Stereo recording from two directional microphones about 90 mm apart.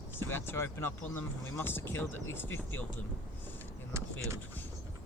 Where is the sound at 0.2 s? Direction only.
25° left (ahead or behind).